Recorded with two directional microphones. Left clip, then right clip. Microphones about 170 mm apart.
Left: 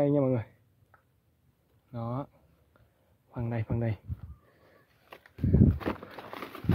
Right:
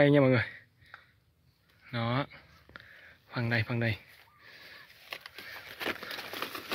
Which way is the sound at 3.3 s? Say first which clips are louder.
Right 5 dB; 10° left (ahead or behind).